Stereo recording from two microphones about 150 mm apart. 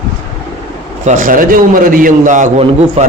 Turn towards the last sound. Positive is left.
turn(degrees=-45)  # may be behind; listen again after turning